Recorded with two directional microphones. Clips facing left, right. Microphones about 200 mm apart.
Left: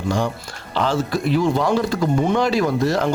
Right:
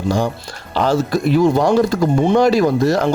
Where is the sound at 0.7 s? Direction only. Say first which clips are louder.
Right 4 dB; 40° right (ahead or behind).